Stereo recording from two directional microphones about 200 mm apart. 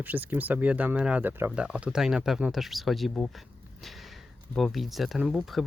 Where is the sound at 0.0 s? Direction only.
10° right (ahead or behind).